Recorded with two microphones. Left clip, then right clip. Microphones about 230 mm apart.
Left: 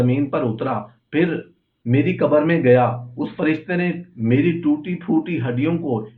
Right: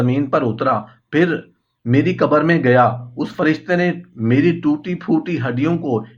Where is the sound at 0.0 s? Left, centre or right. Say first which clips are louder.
Right 3 dB; right.